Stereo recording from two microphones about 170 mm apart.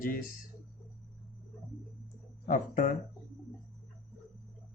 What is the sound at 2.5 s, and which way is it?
Speech, 50° left (ahead or behind).